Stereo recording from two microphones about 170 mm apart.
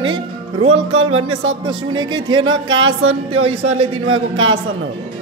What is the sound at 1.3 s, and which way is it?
Speech, 25° right (ahead or behind).